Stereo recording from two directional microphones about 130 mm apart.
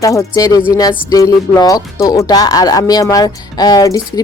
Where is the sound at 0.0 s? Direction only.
25° left (ahead or behind).